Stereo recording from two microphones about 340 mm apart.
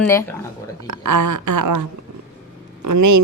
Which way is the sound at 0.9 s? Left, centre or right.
Right.